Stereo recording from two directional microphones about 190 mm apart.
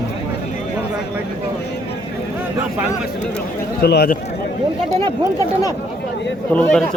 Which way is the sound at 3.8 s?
55° left (ahead or behind).